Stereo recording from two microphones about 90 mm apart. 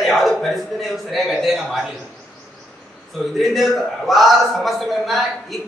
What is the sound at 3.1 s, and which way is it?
A man's voice, centre (ahead or behind).